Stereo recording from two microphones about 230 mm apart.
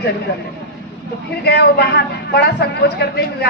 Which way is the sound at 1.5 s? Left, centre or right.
Left.